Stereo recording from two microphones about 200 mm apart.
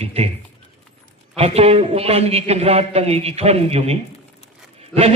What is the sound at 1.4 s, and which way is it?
A man's voice, 30° right (ahead or behind).